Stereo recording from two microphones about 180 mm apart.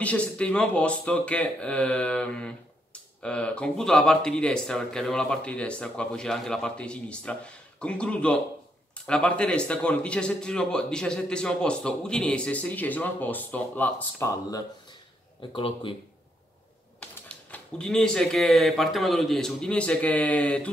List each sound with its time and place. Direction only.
0.0 s speech: 5° left (ahead or behind)
15.5 s speech: 30° left (ahead or behind)
17.3 s speech: 5° left (ahead or behind)